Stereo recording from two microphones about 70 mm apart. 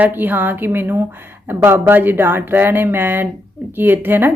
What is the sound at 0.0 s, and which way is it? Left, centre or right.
A woman's voice, right.